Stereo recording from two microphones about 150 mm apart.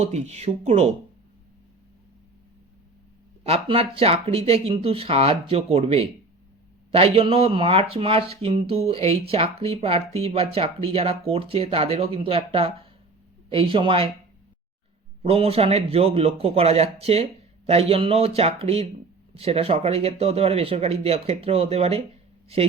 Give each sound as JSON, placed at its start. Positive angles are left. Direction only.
{"t": 0.0, "sound": "a man's voice", "side_deg": -45}
{"t": 3.4, "sound": "speech", "side_deg": -40}
{"t": 15.2, "sound": "a man's voice", "side_deg": -40}